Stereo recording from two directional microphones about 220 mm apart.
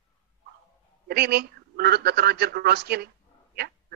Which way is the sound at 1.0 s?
45° right (ahead or behind).